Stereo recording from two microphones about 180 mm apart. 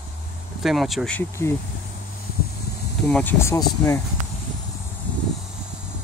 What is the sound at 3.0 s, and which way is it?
Speech, 5° left (ahead or behind).